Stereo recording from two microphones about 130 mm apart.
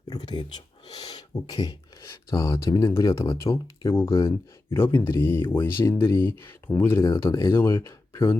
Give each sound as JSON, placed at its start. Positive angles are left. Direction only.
{"t": 0.1, "sound": "speech", "side_deg": 35}